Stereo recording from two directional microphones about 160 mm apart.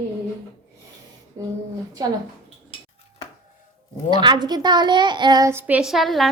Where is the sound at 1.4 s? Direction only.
20° right (ahead or behind).